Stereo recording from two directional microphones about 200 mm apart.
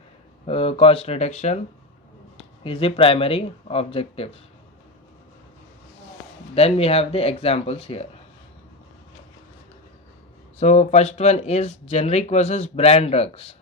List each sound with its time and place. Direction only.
0.4 s speech: 30° left (ahead or behind)
2.6 s speech: 30° left (ahead or behind)
6.5 s speech: 30° left (ahead or behind)
10.6 s speech: 35° left (ahead or behind)